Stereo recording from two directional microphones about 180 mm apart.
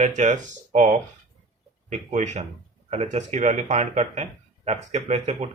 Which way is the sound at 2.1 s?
40° right (ahead or behind).